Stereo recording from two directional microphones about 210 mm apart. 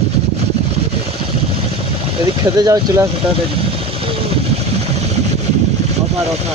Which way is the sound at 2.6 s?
15° right (ahead or behind).